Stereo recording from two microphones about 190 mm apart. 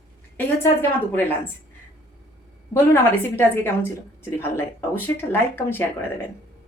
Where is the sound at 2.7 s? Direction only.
10° left (ahead or behind).